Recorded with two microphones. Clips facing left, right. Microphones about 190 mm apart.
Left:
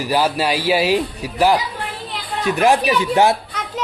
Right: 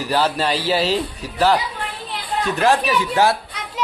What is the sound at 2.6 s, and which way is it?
Speech, 15° left (ahead or behind).